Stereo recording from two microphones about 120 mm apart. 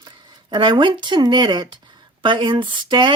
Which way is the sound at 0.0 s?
40° right (ahead or behind).